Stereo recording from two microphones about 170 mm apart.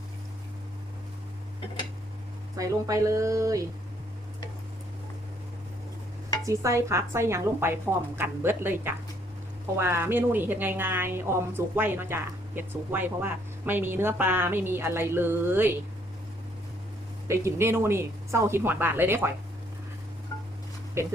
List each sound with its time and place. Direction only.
2.6 s speech: 20° right (ahead or behind)
6.4 s a woman's voice: 20° right (ahead or behind)
17.2 s a woman's voice: 15° right (ahead or behind)
21.0 s a woman's voice: 15° right (ahead or behind)